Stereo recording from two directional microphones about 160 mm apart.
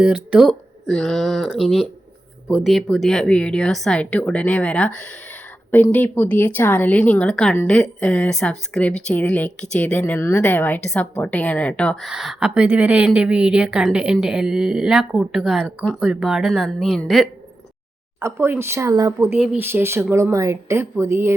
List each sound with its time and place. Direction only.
0.0 s a woman's voice: 5° right (ahead or behind)
18.2 s speech: 15° right (ahead or behind)
19.4 s a woman's voice: 5° right (ahead or behind)
19.6 s speech: 15° right (ahead or behind)